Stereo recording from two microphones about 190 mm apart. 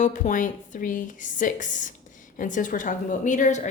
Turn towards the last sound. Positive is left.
turn(degrees=40)  # may be behind; listen again after turning